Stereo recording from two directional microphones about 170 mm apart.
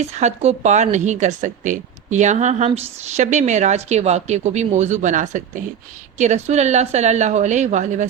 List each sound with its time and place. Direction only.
0.0 s speech: 40° right (ahead or behind)